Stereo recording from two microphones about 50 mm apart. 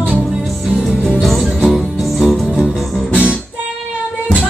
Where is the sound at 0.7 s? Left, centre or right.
Centre.